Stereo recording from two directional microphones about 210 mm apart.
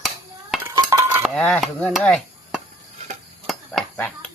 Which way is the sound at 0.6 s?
15° right (ahead or behind).